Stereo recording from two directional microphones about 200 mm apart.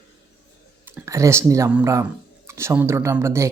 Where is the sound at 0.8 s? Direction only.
15° right (ahead or behind).